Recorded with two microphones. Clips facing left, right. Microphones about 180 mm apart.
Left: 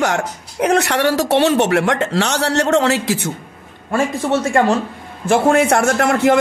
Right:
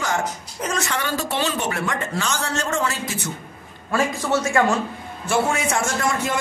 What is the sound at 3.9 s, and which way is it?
Speech, 25° left (ahead or behind).